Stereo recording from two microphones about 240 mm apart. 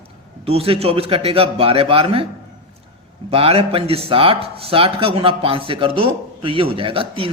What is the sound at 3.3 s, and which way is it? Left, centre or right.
Speech, right.